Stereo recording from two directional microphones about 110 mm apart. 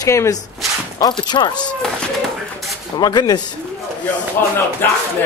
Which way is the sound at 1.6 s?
10° left (ahead or behind).